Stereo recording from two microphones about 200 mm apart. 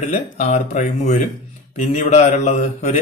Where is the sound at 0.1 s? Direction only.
35° left (ahead or behind).